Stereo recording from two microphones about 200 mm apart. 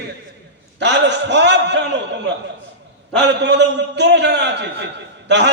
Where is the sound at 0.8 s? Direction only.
60° right (ahead or behind).